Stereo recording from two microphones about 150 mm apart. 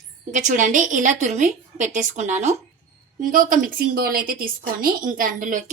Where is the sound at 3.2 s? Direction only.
65° right (ahead or behind).